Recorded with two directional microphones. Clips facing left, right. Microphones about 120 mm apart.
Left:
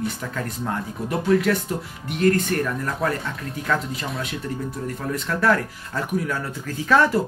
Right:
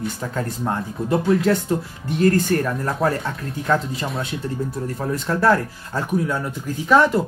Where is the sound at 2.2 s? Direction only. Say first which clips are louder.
Right 2 dB; 35° right (ahead or behind).